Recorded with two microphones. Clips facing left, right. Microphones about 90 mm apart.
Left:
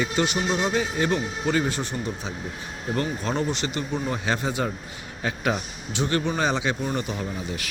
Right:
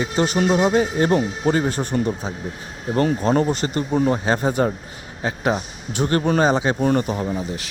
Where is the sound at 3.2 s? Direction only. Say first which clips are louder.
Right 7 dB; 45° right (ahead or behind).